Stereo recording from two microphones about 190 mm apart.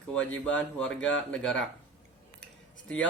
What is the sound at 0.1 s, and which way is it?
Speech, 5° left (ahead or behind).